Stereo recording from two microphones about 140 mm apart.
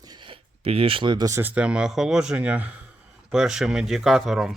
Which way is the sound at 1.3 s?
15° right (ahead or behind).